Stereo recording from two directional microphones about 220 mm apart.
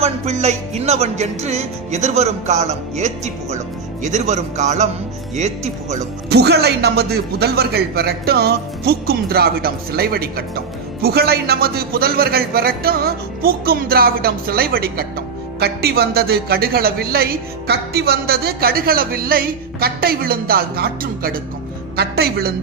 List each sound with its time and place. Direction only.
0.0 s music: 30° right (ahead or behind)
6.2 s a man's voice: 50° right (ahead or behind)